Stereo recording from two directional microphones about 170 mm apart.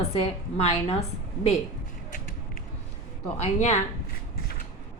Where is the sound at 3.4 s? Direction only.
40° left (ahead or behind).